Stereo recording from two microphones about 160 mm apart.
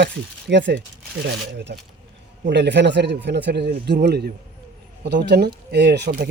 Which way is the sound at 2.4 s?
90° right.